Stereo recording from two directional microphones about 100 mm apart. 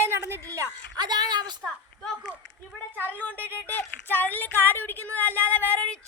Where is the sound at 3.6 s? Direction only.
20° left (ahead or behind).